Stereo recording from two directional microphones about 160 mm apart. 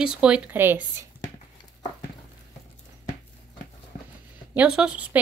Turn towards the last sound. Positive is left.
turn(degrees=-5)  # may be behind; listen again after turning